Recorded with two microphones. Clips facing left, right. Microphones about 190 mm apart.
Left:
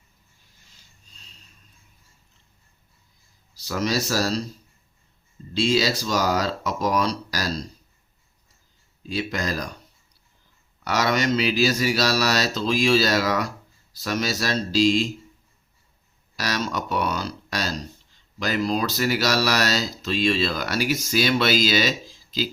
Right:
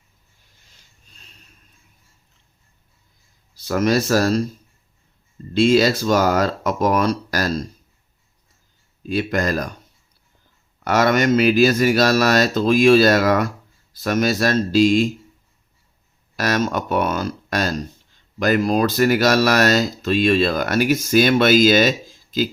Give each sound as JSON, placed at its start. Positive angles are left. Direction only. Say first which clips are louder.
{"t": 3.5, "sound": "speech", "louder": "right 7 dB", "side_deg": -55}
{"t": 5.5, "sound": "speech", "louder": "right 7 dB", "side_deg": -55}
{"t": 9.0, "sound": "speech", "louder": "right 6 dB", "side_deg": -55}
{"t": 10.8, "sound": "speech", "louder": "right 6 dB", "side_deg": -50}
{"t": 16.3, "sound": "speech", "louder": "right 7 dB", "side_deg": -50}